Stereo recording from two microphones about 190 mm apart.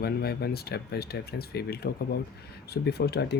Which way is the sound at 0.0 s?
55° left (ahead or behind).